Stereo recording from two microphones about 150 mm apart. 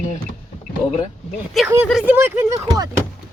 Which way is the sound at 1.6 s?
Centre (ahead or behind).